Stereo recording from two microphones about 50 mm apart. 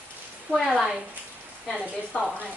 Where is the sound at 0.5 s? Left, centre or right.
Centre.